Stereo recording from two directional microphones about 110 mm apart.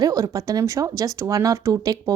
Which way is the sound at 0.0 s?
30° right (ahead or behind).